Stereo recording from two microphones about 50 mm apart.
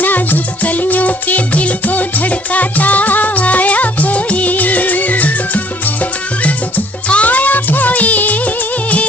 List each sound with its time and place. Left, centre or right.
0.0 s music: left
7.1 s music: left